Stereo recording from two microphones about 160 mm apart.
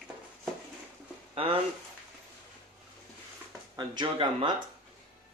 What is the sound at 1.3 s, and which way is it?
Speech, 35° right (ahead or behind).